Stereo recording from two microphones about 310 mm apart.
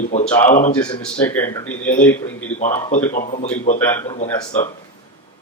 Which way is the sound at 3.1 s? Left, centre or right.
Left.